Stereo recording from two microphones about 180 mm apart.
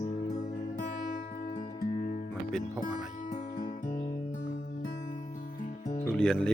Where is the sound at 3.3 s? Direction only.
45° left (ahead or behind).